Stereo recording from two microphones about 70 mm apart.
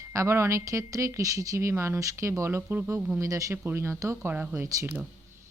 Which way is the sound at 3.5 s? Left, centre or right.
Right.